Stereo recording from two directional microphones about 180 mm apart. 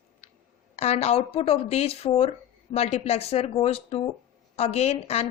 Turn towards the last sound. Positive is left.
turn(degrees=35)  # may be behind; listen again after turning